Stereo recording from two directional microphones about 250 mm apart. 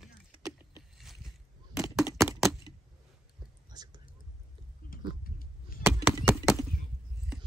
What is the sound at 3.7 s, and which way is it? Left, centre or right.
Whispering, centre.